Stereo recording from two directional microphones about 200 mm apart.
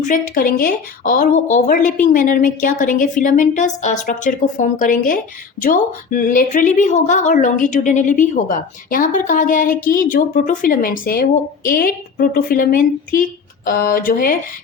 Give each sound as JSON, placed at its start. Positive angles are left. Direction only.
{"t": 0.0, "sound": "a woman's voice", "side_deg": 45}